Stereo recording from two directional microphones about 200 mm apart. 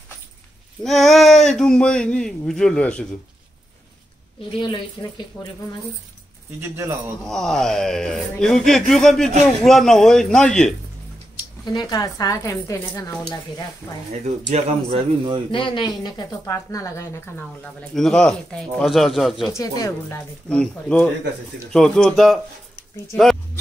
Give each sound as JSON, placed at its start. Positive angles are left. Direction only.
{"t": 0.8, "sound": "speech", "side_deg": 0}
{"t": 4.6, "sound": "a woman's voice", "side_deg": 25}
{"t": 6.6, "sound": "speech", "side_deg": -15}
{"t": 7.2, "sound": "speech", "side_deg": 0}
{"t": 11.6, "sound": "a woman's voice", "side_deg": 20}
{"t": 14.5, "sound": "a man's voice", "side_deg": -25}
{"t": 15.5, "sound": "a woman's voice", "side_deg": 25}
{"t": 17.9, "sound": "speech", "side_deg": 0}
{"t": 19.5, "sound": "speech", "side_deg": 15}
{"t": 20.4, "sound": "speech", "side_deg": 5}